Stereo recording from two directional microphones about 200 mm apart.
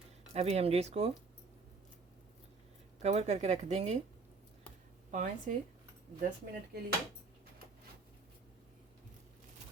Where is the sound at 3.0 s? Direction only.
35° right (ahead or behind).